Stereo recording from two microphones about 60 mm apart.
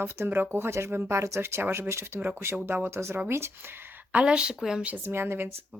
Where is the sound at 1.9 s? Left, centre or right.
Right.